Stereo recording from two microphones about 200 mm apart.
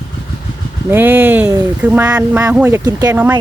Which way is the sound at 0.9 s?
10° right (ahead or behind).